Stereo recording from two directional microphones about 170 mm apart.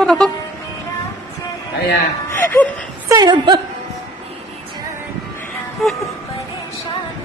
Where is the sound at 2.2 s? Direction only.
10° left (ahead or behind).